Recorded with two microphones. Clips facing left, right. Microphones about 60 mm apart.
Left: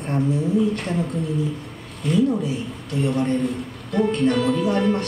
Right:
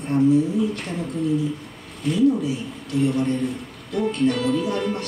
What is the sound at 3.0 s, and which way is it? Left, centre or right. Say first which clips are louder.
A woman's voice: left 2 dB; left.